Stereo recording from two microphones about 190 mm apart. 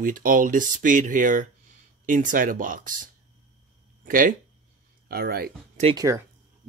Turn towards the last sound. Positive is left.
turn(degrees=-15)  # may be behind; listen again after turning